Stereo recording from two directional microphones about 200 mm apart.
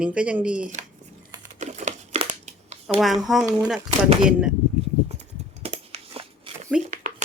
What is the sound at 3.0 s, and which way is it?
Speech, centre (ahead or behind).